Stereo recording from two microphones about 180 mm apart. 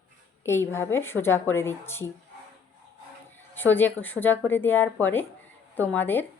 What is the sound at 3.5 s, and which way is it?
Speech, 10° left (ahead or behind).